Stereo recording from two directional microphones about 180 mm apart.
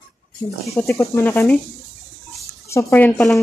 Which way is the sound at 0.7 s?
15° left (ahead or behind).